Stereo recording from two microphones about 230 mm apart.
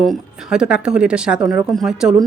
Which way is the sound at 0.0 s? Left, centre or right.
Centre.